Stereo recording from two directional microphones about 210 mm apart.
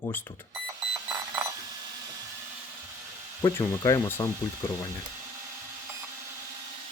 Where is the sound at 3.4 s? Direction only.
20° left (ahead or behind).